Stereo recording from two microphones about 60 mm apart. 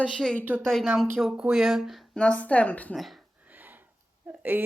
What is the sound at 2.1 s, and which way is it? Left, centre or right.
Speech, centre.